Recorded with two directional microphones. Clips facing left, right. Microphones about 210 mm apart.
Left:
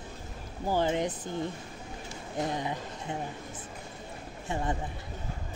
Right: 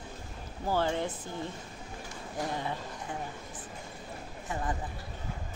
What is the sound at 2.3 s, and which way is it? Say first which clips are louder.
Speech: left 3 dB; 20° left (ahead or behind).